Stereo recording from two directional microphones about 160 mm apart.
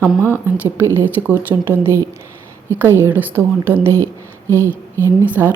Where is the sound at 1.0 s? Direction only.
10° right (ahead or behind).